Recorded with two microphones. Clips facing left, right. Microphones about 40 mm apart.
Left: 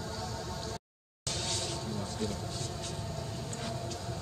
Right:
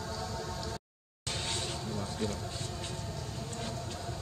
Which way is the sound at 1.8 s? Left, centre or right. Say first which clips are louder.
Even; centre.